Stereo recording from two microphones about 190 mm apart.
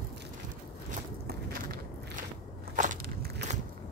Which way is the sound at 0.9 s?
50° right (ahead or behind).